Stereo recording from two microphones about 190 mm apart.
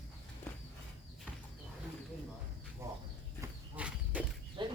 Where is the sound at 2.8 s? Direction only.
15° right (ahead or behind).